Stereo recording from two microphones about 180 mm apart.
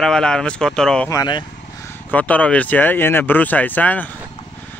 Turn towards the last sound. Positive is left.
turn(degrees=10)  # may be behind; listen again after turning